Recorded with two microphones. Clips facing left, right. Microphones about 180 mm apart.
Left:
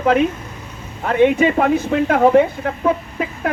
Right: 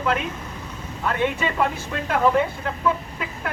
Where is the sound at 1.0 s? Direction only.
55° left (ahead or behind).